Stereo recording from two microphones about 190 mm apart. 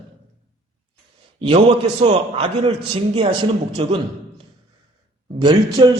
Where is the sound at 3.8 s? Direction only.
30° right (ahead or behind).